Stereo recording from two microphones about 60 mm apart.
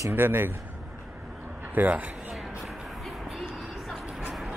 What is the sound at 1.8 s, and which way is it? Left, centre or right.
Speech, right.